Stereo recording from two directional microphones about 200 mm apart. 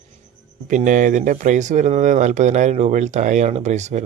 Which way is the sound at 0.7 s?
40° right (ahead or behind).